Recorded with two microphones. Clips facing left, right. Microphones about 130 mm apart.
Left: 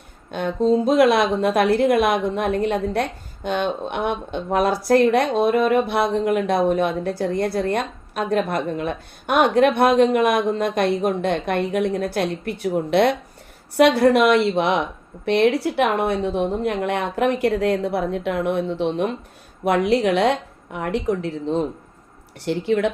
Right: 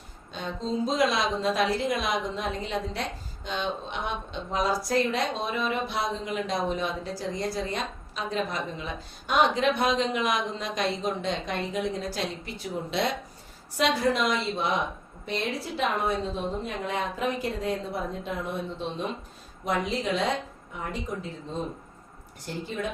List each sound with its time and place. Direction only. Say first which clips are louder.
0.3 s a woman's voice: left 13 dB; 60° left (ahead or behind)